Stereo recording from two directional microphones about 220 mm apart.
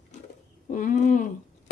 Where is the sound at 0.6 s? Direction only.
35° left (ahead or behind).